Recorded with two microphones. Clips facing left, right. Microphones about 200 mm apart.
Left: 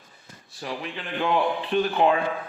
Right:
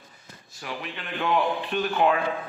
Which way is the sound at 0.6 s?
30° left (ahead or behind).